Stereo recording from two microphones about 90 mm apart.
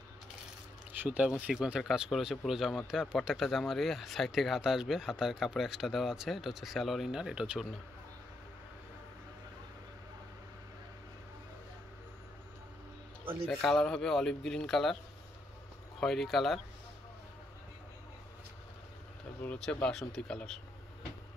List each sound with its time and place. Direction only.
1.0 s speech: 15° right (ahead or behind)
13.6 s speech: 5° left (ahead or behind)
16.0 s speech: 5° left (ahead or behind)
19.6 s speech: 10° left (ahead or behind)